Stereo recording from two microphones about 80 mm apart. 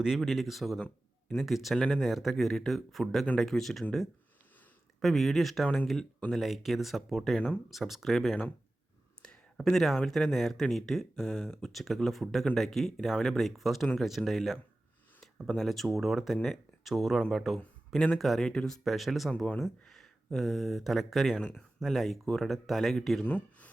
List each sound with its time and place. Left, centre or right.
0.0 s speech: centre
0.8 s a sound: centre
1.5 s speech: centre
4.9 s speech: centre
5.6 s speech: centre
6.3 s speech: centre
9.2 s a sound: centre
9.6 s speech: centre
23.2 s speech: centre